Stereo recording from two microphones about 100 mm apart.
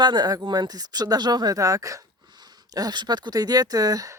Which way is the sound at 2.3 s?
45° right (ahead or behind).